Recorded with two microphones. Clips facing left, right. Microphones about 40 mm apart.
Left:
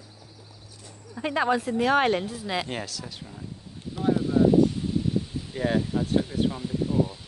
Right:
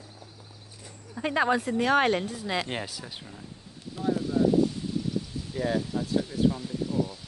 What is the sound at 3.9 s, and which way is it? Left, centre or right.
Speech, left.